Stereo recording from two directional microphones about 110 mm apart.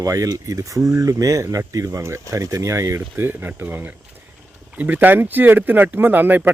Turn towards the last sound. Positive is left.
turn(degrees=-15)  # may be behind; listen again after turning